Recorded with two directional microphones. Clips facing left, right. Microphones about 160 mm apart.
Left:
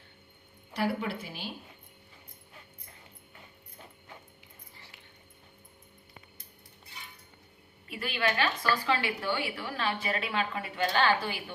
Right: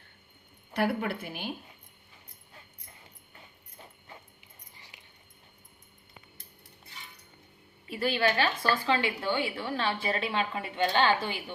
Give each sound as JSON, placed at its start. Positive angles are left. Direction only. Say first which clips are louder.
{"t": 0.7, "sound": "a woman's voice", "louder": "right 2 dB", "side_deg": -55}
{"t": 4.9, "sound": "dog", "louder": "left 1 dB", "side_deg": -15}
{"t": 7.9, "sound": "a woman's voice", "louder": "right 4 dB", "side_deg": -30}